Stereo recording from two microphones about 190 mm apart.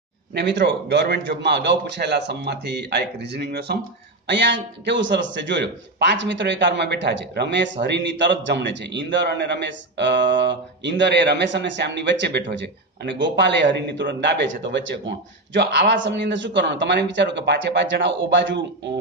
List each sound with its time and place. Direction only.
0.3 s a man's voice: 65° right (ahead or behind)